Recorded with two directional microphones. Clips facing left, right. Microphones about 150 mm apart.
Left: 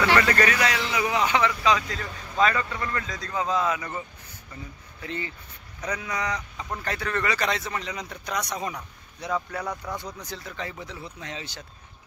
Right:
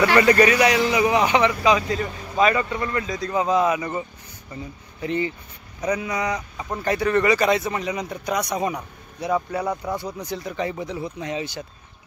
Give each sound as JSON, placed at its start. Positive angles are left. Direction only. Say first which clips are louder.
{"t": 0.1, "sound": "speech", "louder": "right 6 dB", "side_deg": -15}
{"t": 5.0, "sound": "speech", "louder": "right 9 dB", "side_deg": -20}